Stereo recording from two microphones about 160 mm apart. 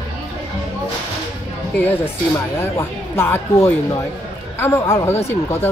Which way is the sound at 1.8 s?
15° left (ahead or behind).